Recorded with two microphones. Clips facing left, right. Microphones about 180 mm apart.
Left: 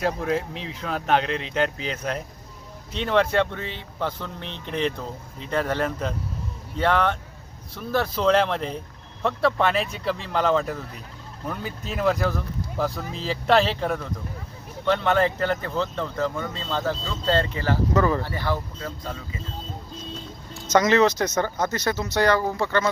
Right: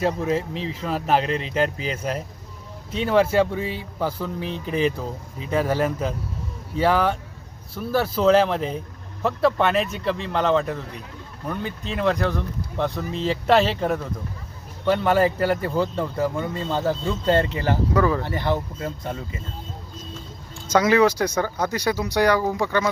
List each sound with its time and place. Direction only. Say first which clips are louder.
0.0 s speech: right 2 dB; centre (ahead or behind); by 19.1 s 20° right (ahead or behind)
20.7 s speech: right 1 dB; 10° right (ahead or behind)